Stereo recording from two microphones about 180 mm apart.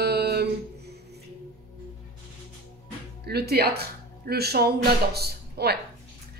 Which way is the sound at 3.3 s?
60° right (ahead or behind).